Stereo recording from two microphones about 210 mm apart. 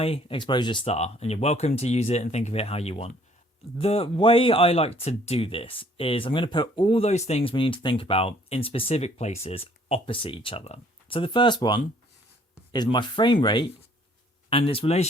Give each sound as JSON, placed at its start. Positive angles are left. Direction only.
{"t": 0.0, "sound": "speech", "side_deg": 25}